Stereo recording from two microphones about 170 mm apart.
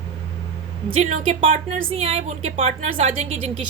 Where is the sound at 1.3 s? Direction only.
35° right (ahead or behind).